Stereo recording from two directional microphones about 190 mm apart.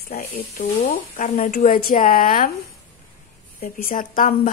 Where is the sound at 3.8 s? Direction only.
45° left (ahead or behind).